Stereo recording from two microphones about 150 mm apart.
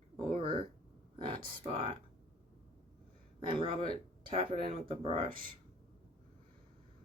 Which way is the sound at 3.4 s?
30° right (ahead or behind).